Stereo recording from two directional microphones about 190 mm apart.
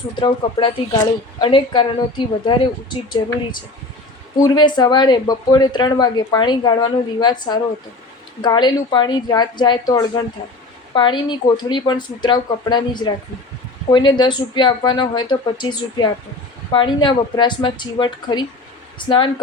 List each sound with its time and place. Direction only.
0.2 s speech: 25° left (ahead or behind)
4.4 s speech: 20° left (ahead or behind)